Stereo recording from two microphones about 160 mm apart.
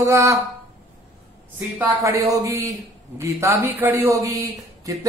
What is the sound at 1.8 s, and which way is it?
A man's voice, 20° right (ahead or behind).